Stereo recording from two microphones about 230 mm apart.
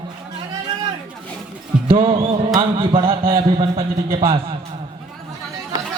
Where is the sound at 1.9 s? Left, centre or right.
Right.